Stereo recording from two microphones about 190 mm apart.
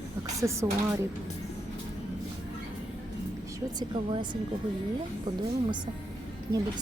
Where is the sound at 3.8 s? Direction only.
25° right (ahead or behind).